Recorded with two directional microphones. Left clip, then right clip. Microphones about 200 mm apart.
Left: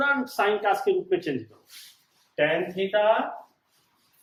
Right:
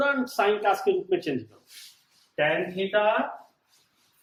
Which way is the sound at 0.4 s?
30° right (ahead or behind).